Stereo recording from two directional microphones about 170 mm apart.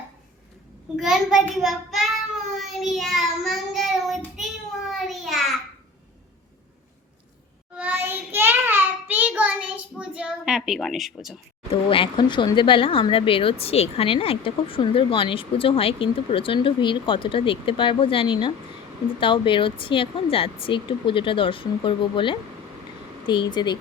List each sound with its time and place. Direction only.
0.9 s child singing: 5° right (ahead or behind)
4.9 s a sound: centre (ahead or behind)
7.8 s child singing: 10° right (ahead or behind)
11.7 s speech: 30° left (ahead or behind)